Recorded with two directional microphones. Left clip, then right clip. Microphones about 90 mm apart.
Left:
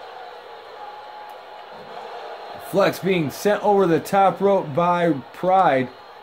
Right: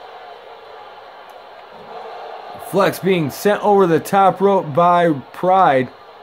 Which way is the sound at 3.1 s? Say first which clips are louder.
Right 4 dB; 90° right.